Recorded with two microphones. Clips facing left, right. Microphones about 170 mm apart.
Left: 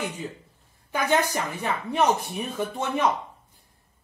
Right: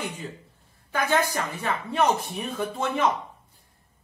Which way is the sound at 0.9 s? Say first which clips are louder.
Left 1 dB; 15° left (ahead or behind).